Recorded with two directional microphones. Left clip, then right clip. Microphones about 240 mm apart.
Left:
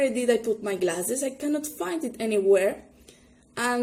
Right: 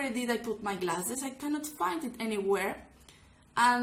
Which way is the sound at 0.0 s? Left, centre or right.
Centre.